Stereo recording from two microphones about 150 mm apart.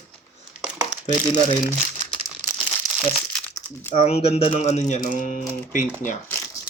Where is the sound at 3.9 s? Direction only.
40° left (ahead or behind); by 5.9 s 55° left (ahead or behind).